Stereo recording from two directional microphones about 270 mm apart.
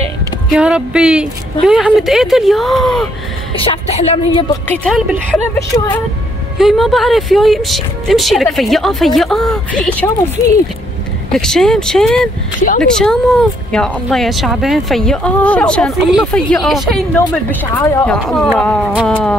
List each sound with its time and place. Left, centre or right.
0.6 s speech: centre
3.5 s speech: left
4.6 s a woman's voice: centre
6.6 s speech: centre
11.3 s speech: centre